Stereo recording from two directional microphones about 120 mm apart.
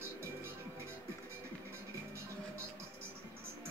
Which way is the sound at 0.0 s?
20° right (ahead or behind).